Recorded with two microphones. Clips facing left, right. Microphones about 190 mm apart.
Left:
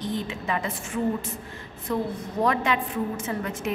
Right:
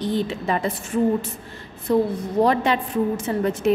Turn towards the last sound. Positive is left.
turn(degrees=-35)  # may be behind; listen again after turning